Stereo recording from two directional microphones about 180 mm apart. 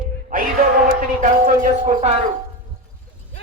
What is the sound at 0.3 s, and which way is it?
Music, 50° right (ahead or behind).